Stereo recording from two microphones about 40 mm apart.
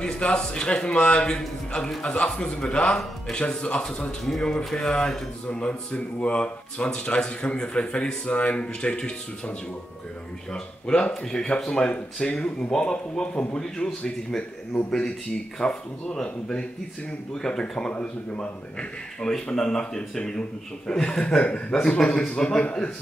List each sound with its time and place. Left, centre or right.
0.0 s a man's voice: left
5.5 s speech: left
10.5 s a man's voice: left
19.3 s a man's voice: centre
21.4 s a man's voice: left
21.8 s speech: centre